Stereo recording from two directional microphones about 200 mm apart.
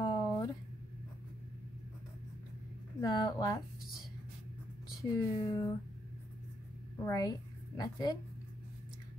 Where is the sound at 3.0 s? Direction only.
20° left (ahead or behind).